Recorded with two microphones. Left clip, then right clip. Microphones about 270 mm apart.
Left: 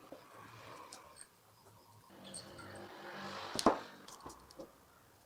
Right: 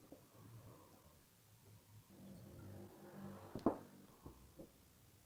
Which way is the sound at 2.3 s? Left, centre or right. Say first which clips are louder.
Left 11 dB; left.